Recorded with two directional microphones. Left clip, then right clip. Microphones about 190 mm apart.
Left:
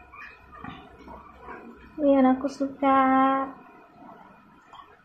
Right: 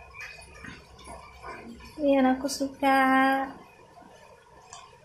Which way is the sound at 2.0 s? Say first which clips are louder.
Left 3 dB; 25° left (ahead or behind).